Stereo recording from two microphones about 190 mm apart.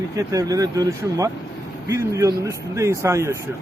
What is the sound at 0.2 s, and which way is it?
Speech, 15° right (ahead or behind).